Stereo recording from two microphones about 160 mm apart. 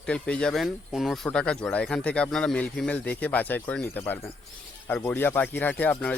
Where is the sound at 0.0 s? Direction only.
5° left (ahead or behind).